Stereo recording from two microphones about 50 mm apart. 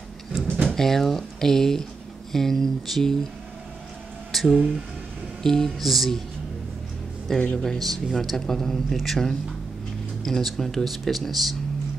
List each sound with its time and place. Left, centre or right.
0.7 s a man's voice: centre
4.3 s speech: centre
7.3 s speech: left
7.6 s a man's voice: centre